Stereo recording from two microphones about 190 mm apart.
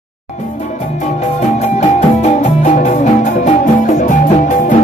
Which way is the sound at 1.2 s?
40° left (ahead or behind).